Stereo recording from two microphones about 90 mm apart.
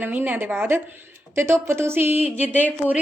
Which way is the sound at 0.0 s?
20° right (ahead or behind).